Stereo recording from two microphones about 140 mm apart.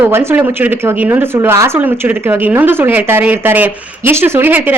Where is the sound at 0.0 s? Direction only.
15° right (ahead or behind).